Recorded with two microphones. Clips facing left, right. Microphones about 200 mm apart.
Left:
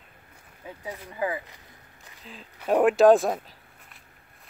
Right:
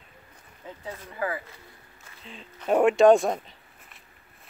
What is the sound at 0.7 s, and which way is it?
Speech, 15° left (ahead or behind).